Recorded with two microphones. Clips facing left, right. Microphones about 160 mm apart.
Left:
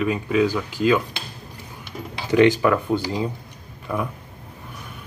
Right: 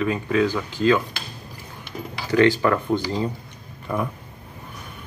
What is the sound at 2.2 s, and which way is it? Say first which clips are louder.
Speech: left 2 dB; 20° left (ahead or behind).